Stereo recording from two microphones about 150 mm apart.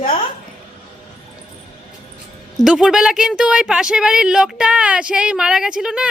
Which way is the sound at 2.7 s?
5° right (ahead or behind).